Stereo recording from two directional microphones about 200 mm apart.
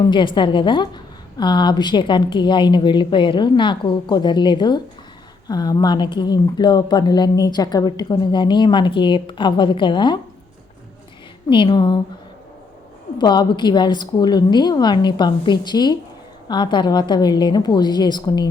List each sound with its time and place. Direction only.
0.1 s speech: 25° left (ahead or behind)
11.4 s speech: 25° left (ahead or behind)
13.1 s speech: 20° left (ahead or behind)